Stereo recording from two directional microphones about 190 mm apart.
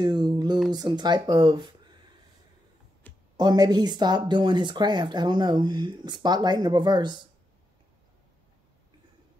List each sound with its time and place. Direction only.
0.0 s a sound: 20° right (ahead or behind)
0.7 s speech: 20° right (ahead or behind)
3.3 s speech: 20° right (ahead or behind)